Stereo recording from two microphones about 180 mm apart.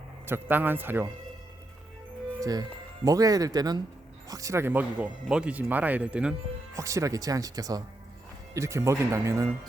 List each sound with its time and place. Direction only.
0.3 s speech: 10° right (ahead or behind)
2.4 s speech: 20° right (ahead or behind)
6.7 s speech: 15° right (ahead or behind)